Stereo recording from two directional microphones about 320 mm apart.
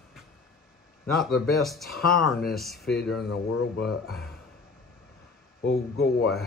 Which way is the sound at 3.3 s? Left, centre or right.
Left.